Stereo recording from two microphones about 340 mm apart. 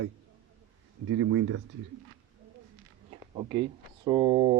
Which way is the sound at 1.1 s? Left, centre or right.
Right.